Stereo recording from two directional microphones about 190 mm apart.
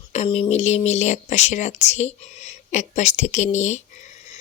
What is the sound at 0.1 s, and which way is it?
Speech, 35° left (ahead or behind).